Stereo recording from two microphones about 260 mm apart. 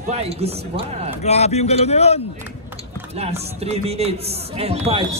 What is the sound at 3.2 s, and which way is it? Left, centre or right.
Speech, right.